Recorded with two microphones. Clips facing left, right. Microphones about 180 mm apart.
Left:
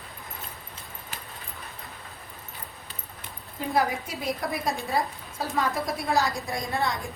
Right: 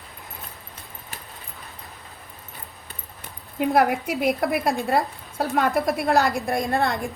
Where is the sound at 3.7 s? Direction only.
60° right (ahead or behind).